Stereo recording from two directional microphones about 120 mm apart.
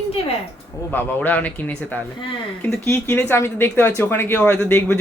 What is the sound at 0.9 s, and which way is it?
Speech, 15° left (ahead or behind).